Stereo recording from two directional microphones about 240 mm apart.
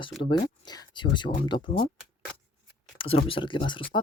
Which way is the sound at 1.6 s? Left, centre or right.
Left.